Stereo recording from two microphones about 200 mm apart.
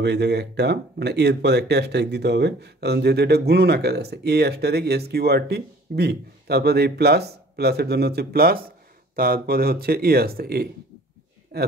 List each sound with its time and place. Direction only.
0.0 s speech: 55° right (ahead or behind)